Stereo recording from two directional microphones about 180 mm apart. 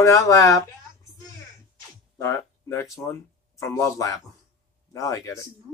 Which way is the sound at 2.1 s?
15° left (ahead or behind).